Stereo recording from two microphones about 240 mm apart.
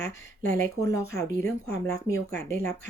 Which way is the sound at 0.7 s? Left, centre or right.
Centre.